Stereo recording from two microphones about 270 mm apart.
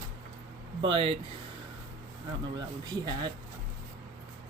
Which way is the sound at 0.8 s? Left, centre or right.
Centre.